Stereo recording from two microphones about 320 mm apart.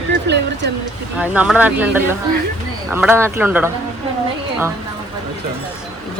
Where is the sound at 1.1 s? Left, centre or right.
Centre.